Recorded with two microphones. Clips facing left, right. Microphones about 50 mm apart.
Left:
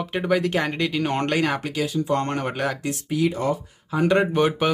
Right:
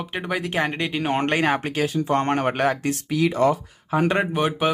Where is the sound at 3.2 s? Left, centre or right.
Right.